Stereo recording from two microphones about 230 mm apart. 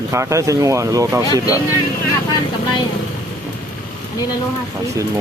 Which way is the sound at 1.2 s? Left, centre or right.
Centre.